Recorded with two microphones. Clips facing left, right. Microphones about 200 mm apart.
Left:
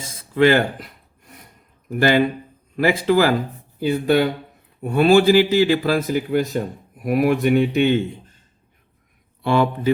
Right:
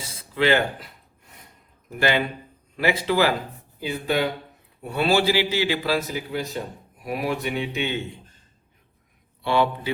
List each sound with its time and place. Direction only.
0.2 s speech: 45° left (ahead or behind)
2.0 s a man's voice: 45° left (ahead or behind)
9.4 s a man's voice: 50° left (ahead or behind)